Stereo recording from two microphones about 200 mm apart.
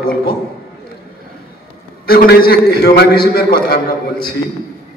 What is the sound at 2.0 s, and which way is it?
A man's voice, 50° left (ahead or behind).